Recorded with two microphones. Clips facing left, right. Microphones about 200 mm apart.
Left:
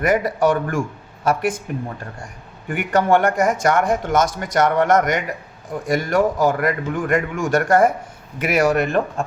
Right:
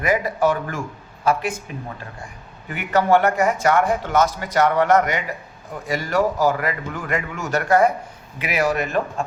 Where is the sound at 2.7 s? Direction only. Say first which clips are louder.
Left 1 dB; 50° left (ahead or behind).